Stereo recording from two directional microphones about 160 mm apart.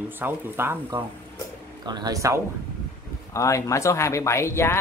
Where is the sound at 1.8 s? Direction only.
25° right (ahead or behind).